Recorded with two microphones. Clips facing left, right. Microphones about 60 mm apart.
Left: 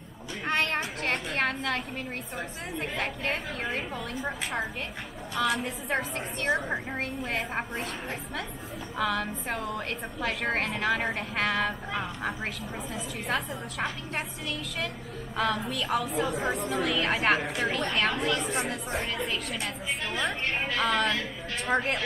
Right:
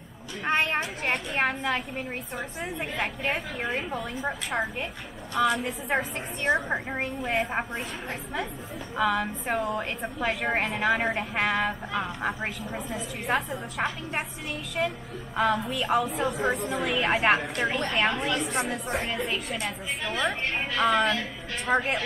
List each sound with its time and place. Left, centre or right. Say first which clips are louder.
0.5 s a sound: right 3 dB; centre
1.1 s a woman's voice: right 2 dB; centre
5.9 s a woman's voice: right 2 dB; centre
8.9 s a woman's voice: right 3 dB; centre
16.1 s a woman's voice: right 2 dB; centre
17.4 s a woman's voice: right 1 dB; centre
17.9 s a woman's voice: right 2 dB; centre